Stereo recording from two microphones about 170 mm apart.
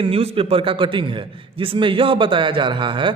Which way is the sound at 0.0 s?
35° right (ahead or behind).